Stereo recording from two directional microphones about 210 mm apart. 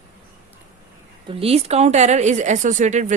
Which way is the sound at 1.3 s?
30° right (ahead or behind).